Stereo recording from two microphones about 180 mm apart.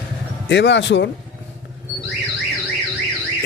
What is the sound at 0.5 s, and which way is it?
Speech, 75° left (ahead or behind).